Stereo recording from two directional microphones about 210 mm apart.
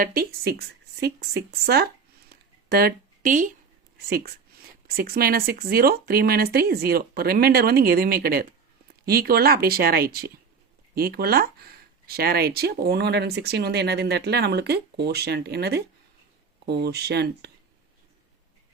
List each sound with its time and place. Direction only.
0.0 s speech: 45° right (ahead or behind)
2.3 s a sound: 50° right (ahead or behind)
4.0 s speech: 45° right (ahead or behind)